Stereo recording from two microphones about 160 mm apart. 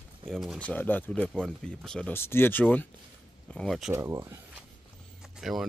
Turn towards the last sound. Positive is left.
turn(degrees=0)  # may be behind; listen again after turning